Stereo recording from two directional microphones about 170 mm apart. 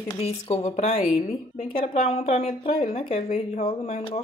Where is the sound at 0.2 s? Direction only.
40° left (ahead or behind).